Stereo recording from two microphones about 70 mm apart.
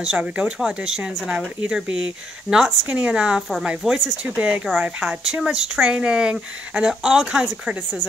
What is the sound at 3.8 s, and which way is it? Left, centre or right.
Speech, centre.